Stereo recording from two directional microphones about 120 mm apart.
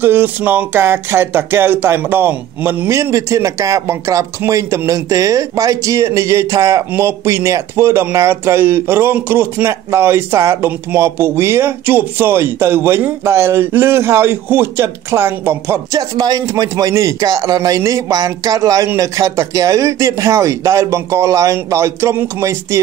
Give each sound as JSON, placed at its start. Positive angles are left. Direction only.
{"t": 0.0, "sound": "speech", "side_deg": -15}
{"t": 16.0, "sound": "speech", "side_deg": -30}